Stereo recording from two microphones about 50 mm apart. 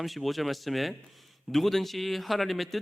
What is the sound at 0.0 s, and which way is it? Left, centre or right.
A man's voice, centre.